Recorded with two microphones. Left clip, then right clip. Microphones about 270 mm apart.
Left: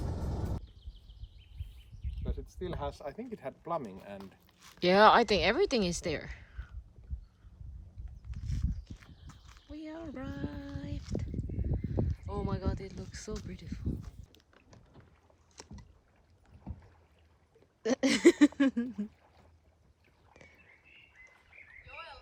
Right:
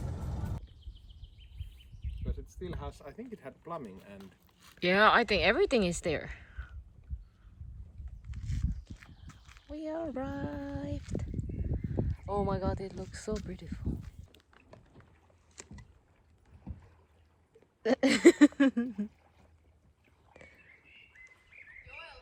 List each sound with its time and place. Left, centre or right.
2.0 s speech: left
4.8 s speech: centre
9.5 s a sound: left
9.7 s speech: centre
17.8 s speech: centre
20.3 s a sound: centre
21.8 s frog: centre